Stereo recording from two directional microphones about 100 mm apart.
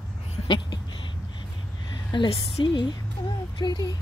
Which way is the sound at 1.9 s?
50° left (ahead or behind).